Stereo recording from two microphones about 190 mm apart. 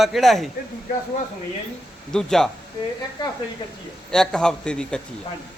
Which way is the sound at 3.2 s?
20° left (ahead or behind).